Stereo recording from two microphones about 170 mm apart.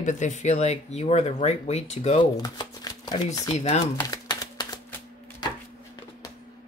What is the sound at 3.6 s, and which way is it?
Speech, 40° left (ahead or behind).